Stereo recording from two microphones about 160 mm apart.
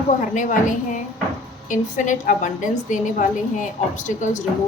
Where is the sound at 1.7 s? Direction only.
50° left (ahead or behind).